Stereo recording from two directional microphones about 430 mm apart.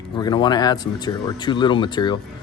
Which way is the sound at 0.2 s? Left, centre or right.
Centre.